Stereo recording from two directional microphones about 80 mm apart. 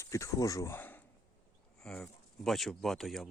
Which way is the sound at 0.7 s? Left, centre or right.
Left.